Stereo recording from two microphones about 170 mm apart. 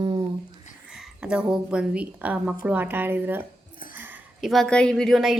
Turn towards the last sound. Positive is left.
turn(degrees=0)  # may be behind; listen again after turning